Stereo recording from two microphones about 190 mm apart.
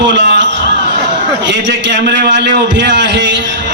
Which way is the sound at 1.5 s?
70° right (ahead or behind).